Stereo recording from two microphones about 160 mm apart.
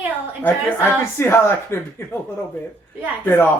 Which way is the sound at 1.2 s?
15° left (ahead or behind).